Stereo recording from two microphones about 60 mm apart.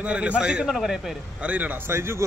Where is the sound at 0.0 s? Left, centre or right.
Centre.